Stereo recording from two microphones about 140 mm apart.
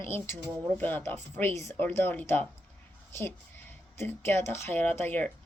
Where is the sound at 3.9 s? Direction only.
15° left (ahead or behind).